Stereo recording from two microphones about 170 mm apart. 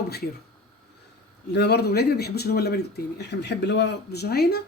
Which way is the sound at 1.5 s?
75° left (ahead or behind).